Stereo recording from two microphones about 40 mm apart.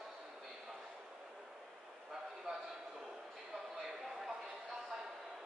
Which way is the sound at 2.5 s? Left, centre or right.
Centre.